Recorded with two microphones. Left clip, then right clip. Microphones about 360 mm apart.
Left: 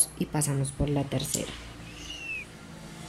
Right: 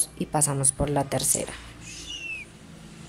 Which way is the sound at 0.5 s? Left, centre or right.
Right.